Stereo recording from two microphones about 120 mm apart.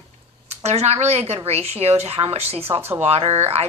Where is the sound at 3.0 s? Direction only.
60° right (ahead or behind).